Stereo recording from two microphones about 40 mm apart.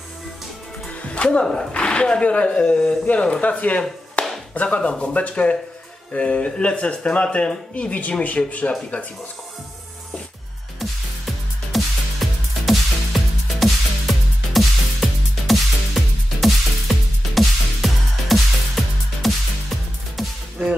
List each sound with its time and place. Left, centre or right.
0.8 s music: left
1.7 s speech: left
4.2 s tap: left
4.6 s speech: left
10.8 s music: centre
20.6 s music: right